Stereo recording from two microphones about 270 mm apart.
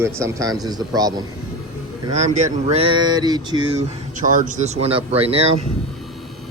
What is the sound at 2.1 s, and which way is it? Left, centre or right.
Mantra, right.